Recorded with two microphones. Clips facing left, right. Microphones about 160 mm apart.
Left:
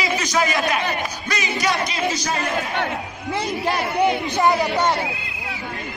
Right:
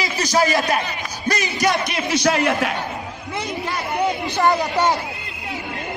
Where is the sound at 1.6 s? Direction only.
70° right (ahead or behind).